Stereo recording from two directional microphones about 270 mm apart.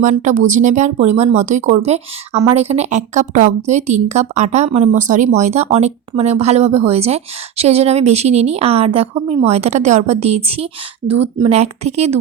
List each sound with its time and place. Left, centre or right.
0.0 s a woman's voice: right